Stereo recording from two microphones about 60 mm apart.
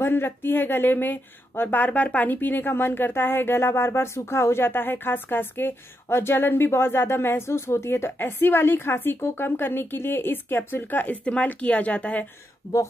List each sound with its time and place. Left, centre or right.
0.0 s speech: left